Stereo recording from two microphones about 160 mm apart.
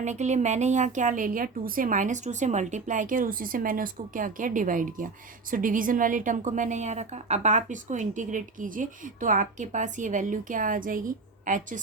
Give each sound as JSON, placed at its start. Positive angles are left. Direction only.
{"t": 0.0, "sound": "a woman's voice", "side_deg": -45}